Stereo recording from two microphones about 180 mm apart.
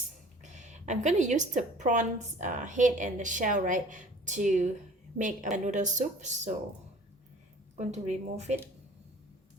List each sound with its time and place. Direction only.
0.4 s a woman's voice: 40° right (ahead or behind)
7.8 s speech: 40° right (ahead or behind)